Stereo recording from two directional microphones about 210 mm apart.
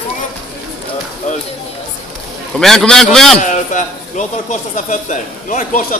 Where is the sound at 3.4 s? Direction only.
35° left (ahead or behind).